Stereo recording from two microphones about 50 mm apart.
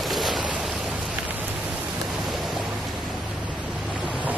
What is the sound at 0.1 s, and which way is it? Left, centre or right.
Waves, centre.